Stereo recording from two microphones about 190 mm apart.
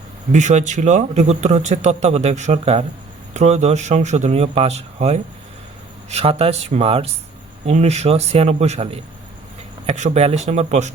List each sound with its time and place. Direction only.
0.3 s a man's voice: 40° right (ahead or behind)